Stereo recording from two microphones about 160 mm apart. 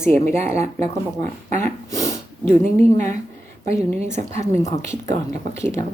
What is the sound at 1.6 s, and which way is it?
Dog, 20° left (ahead or behind).